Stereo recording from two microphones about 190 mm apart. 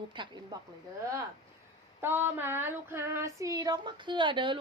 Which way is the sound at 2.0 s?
10° right (ahead or behind).